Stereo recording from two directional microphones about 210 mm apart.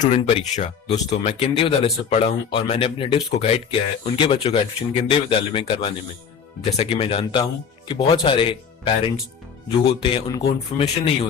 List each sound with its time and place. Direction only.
0.0 s speech: 30° left (ahead or behind)